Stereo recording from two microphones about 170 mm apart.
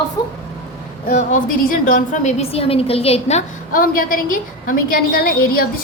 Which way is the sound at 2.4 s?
35° left (ahead or behind).